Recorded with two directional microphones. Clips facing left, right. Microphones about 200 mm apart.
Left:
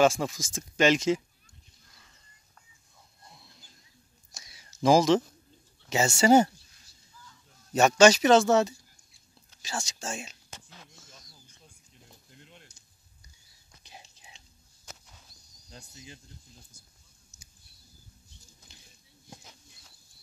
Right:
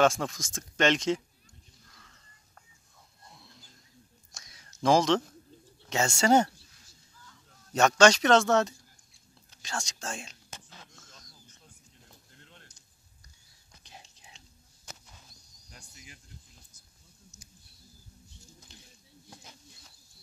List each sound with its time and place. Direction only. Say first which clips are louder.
0.0 s speech: left 2 dB; 5° left (ahead or behind)
4.3 s whispering: even; 5° left (ahead or behind)
5.9 s speech: left 3 dB; 5° left (ahead or behind)
7.7 s speech: left 2 dB; 5° left (ahead or behind)
11.0 s a sound: left 1 dB; 5° left (ahead or behind)
13.8 s whispering: left 1 dB; 5° left (ahead or behind)
15.7 s insect: left 5 dB; 20° left (ahead or behind)